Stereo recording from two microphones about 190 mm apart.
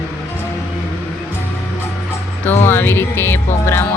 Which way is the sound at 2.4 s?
10° left (ahead or behind).